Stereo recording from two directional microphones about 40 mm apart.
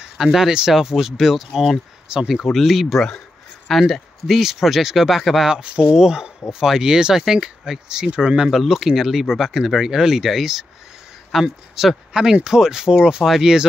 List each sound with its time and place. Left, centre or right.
0.0 s speech: centre
2.5 s speech: centre
5.4 s speech: right
5.9 s speech: centre
8.5 s speech: centre